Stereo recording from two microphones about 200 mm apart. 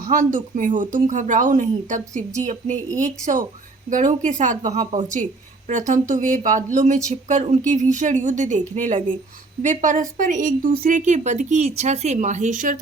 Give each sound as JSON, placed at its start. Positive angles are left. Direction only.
{"t": 0.3, "sound": "a woman's voice", "side_deg": -40}